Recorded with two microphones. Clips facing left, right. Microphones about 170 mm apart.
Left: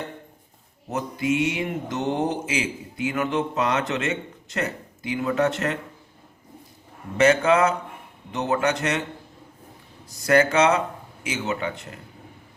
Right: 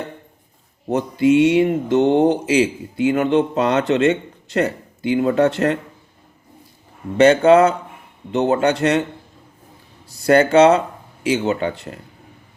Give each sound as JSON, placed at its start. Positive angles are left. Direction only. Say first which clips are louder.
{"t": 0.9, "sound": "mantra", "louder": "right 9 dB", "side_deg": -30}
{"t": 7.2, "sound": "mantra", "louder": "right 7 dB", "side_deg": -30}
{"t": 10.1, "sound": "speech", "louder": "right 5 dB", "side_deg": -30}